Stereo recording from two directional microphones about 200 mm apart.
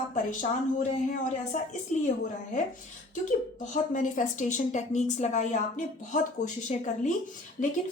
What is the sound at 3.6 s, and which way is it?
A woman's voice, 40° left (ahead or behind).